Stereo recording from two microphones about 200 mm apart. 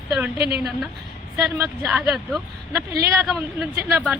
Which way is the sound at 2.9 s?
15° right (ahead or behind).